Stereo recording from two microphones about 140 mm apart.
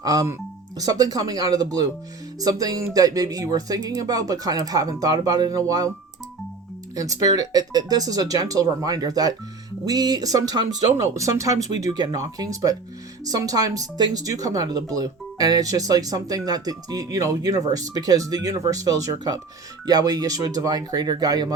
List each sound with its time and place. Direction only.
0.0 s speech: 25° right (ahead or behind)
6.9 s speech: 25° right (ahead or behind)